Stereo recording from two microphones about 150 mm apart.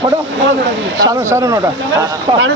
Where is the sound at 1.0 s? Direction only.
20° right (ahead or behind).